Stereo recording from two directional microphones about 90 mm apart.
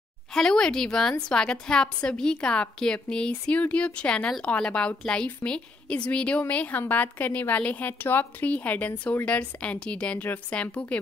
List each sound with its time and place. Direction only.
0.3 s a woman's voice: 5° left (ahead or behind)